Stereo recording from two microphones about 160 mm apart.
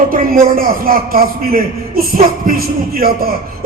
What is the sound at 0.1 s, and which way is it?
A man's voice, 65° right (ahead or behind).